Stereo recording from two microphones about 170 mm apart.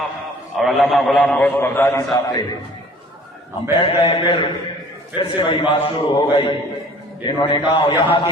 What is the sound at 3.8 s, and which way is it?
A man's voice, 30° left (ahead or behind).